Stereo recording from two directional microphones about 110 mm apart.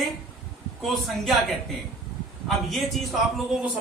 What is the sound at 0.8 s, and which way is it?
Speech, centre (ahead or behind).